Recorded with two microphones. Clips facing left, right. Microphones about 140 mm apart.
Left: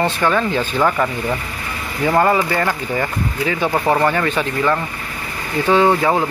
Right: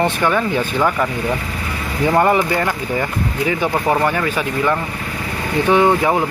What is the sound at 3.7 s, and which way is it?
Speech, 10° left (ahead or behind).